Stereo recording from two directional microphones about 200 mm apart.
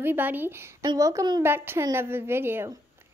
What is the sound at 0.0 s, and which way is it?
A woman's voice, 10° right (ahead or behind).